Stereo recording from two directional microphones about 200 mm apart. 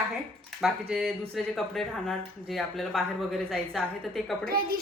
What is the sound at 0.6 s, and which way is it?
A woman's voice, centre (ahead or behind).